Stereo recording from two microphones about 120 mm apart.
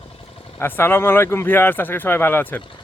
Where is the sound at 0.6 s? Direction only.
20° left (ahead or behind).